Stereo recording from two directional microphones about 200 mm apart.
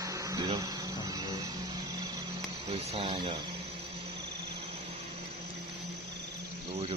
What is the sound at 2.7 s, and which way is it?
Speech, 30° right (ahead or behind).